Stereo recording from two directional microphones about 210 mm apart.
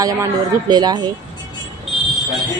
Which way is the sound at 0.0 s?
15° right (ahead or behind).